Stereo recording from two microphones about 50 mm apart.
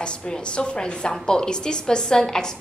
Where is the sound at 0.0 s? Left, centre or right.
Left.